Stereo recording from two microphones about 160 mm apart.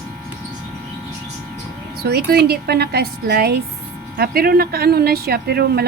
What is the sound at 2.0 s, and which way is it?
Speech, 80° right.